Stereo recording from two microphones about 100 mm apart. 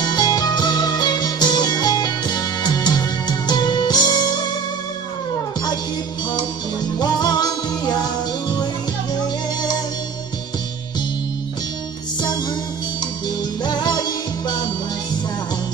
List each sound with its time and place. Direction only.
0.0 s music: 45° left (ahead or behind)
7.0 s music: 45° left (ahead or behind)
13.7 s music: 45° left (ahead or behind)